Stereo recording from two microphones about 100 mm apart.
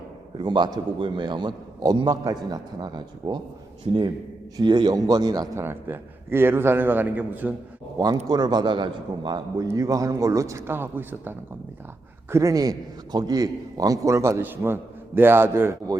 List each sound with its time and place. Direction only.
0.3 s a man's voice: 50° right (ahead or behind)
3.9 s a man's voice: 85° right
4.5 s a man's voice: 50° right (ahead or behind)
5.5 s a man's voice: 25° right (ahead or behind)
7.9 s a man's voice: 40° right (ahead or behind); by 11.3 s 20° right (ahead or behind)
12.3 s a man's voice: 30° right (ahead or behind)